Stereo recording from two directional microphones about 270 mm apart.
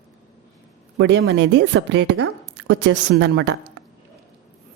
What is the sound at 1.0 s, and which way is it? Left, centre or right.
Speech, right.